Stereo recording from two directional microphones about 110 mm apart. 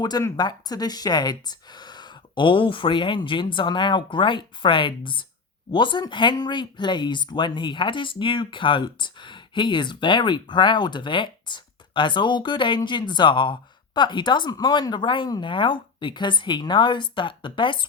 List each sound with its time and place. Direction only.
0.0 s speech: 35° left (ahead or behind)